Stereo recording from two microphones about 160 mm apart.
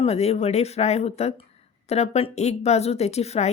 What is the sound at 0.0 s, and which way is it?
Speech, 40° left (ahead or behind).